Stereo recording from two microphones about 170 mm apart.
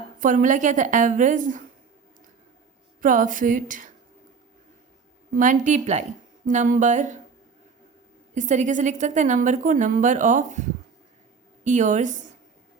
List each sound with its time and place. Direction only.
0.2 s a woman's voice: 50° right (ahead or behind)
3.0 s a woman's voice: 50° right (ahead or behind)
5.4 s a woman's voice: 45° right (ahead or behind)
8.4 s a woman's voice: 45° right (ahead or behind)